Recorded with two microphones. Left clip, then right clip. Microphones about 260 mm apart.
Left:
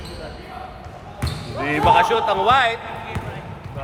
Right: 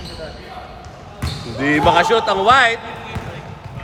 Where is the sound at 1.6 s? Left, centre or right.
Right.